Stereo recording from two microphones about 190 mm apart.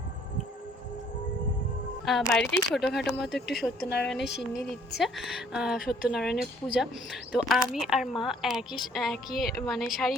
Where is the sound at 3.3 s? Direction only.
65° left (ahead or behind).